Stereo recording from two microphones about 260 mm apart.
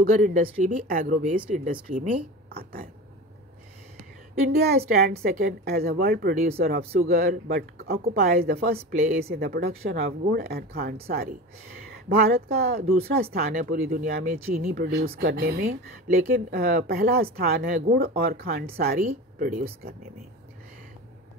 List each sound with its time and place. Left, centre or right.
0.1 s speech: right
2.5 s a sound: right
4.5 s speech: right